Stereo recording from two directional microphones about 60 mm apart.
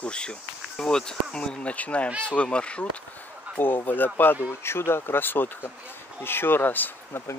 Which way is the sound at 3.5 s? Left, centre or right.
Left.